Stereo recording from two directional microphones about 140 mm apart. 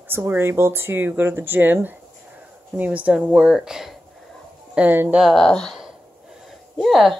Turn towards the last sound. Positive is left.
turn(degrees=0)  # may be behind; listen again after turning